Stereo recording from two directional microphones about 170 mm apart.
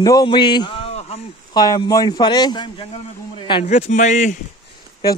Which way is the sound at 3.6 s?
40° left (ahead or behind).